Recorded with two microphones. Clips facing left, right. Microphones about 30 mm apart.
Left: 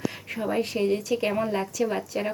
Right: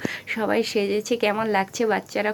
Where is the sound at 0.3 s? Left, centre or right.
Right.